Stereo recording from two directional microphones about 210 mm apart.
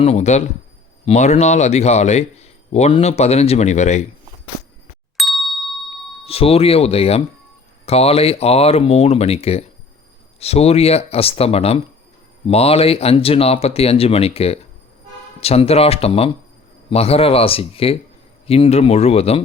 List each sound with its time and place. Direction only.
0.0 s speech: 30° left (ahead or behind)
5.1 s ding: centre (ahead or behind)
6.2 s speech: 30° left (ahead or behind)